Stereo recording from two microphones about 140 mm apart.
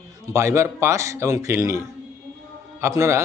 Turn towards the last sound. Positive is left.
turn(degrees=-20)  # may be behind; listen again after turning